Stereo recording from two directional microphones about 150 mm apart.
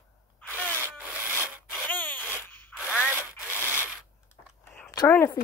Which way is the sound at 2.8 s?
10° right (ahead or behind).